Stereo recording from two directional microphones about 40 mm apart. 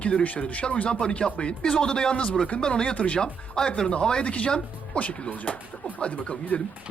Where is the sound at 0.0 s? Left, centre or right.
Left.